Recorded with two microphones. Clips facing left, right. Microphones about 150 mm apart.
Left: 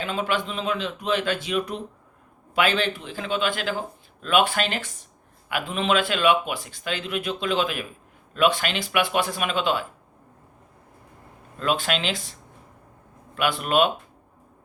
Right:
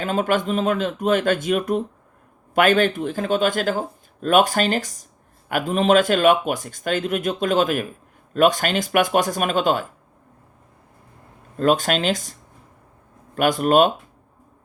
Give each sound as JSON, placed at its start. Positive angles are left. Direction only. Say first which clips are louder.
{"t": 0.0, "sound": "speech", "louder": "right 5 dB", "side_deg": -45}
{"t": 11.5, "sound": "speech", "louder": "right 6 dB", "side_deg": -45}